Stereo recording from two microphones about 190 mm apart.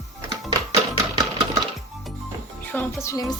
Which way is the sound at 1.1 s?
25° right (ahead or behind).